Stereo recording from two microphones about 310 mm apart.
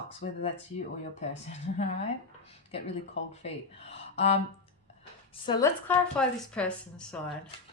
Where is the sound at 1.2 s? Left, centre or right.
Left.